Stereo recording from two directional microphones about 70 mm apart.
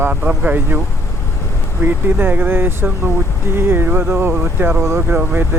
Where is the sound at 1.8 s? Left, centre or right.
Right.